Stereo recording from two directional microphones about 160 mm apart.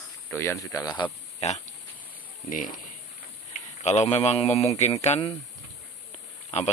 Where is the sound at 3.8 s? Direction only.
45° left (ahead or behind).